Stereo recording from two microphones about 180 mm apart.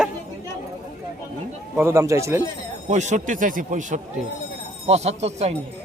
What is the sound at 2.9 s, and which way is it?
A man's voice, 40° right (ahead or behind).